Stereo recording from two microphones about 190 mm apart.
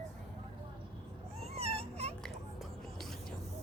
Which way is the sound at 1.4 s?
35° right (ahead or behind).